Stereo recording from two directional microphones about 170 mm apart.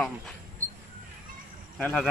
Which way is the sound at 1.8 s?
Centre (ahead or behind).